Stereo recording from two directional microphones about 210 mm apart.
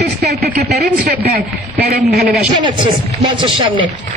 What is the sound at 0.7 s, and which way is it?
A man's voice, 45° right (ahead or behind).